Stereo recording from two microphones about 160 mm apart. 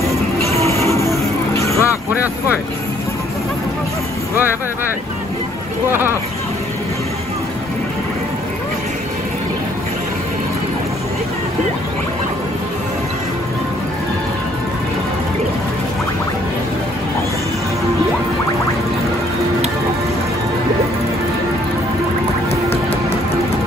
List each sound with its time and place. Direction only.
0.7 s music: 20° left (ahead or behind)
5.9 s speech: 15° right (ahead or behind)